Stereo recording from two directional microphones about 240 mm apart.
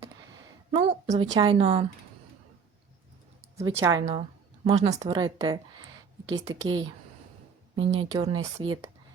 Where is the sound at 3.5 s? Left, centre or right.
Centre.